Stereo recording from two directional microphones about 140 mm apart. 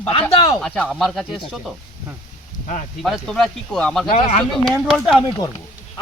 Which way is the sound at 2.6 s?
60° left (ahead or behind).